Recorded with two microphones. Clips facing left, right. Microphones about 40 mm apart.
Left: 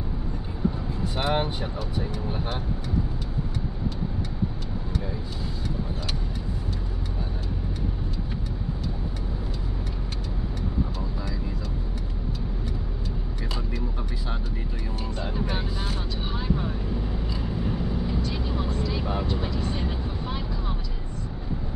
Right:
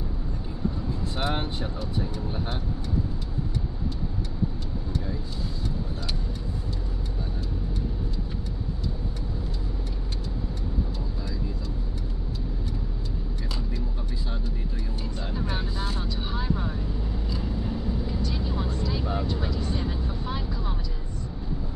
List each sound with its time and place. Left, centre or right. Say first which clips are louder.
1.1 s speech: left 5 dB; left
11.1 s vehicle: left 1 dB; left
15.2 s speech: left 1 dB; centre
16.2 s vehicle: left 3 dB; centre
18.7 s speech: left 1 dB; centre
20.2 s vehicle: even; centre